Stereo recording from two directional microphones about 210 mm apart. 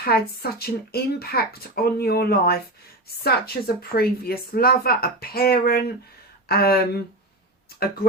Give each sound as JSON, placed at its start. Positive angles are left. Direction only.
{"t": 0.0, "sound": "speech", "side_deg": 45}